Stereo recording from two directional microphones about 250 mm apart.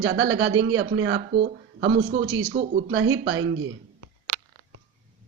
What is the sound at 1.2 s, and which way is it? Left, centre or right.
Speech, right.